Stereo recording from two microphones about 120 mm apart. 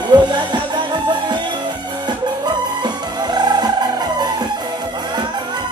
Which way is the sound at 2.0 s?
35° right (ahead or behind).